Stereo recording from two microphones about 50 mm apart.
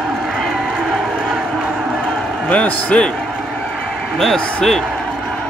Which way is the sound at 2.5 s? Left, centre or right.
Left.